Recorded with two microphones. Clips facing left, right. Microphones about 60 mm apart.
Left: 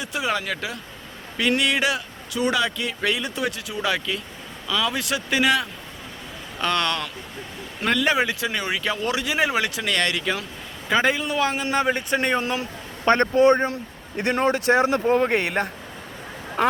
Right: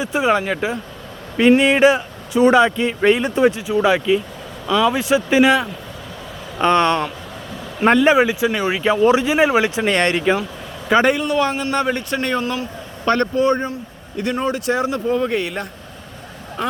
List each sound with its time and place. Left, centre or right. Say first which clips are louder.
0.1 s speech: right 8 dB; right
3.7 s speech: right 10 dB; right
8.1 s speech: right 7 dB; centre
8.7 s speech: right 13 dB; right
10.8 s a man's voice: right 6 dB; centre
12.4 s speech: right 3 dB; left